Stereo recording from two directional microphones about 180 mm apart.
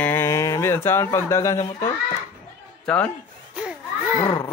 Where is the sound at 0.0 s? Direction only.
15° left (ahead or behind).